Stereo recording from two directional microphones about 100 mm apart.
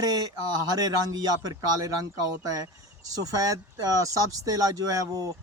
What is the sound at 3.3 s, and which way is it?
Speech, 35° right (ahead or behind).